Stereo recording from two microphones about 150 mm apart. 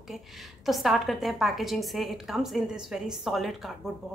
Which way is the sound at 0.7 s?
Centre (ahead or behind).